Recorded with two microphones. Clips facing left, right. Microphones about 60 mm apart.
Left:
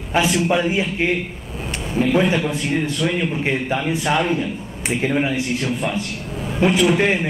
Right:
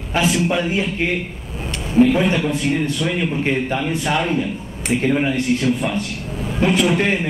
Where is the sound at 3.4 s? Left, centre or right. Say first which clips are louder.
Right 1 dB; centre.